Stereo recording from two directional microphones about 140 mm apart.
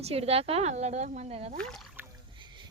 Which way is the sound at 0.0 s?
45° right (ahead or behind).